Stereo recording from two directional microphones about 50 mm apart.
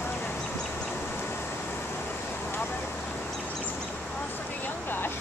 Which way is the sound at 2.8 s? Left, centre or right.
Left.